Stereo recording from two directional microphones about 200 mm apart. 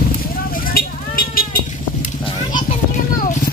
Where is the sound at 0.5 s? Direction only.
45° left (ahead or behind).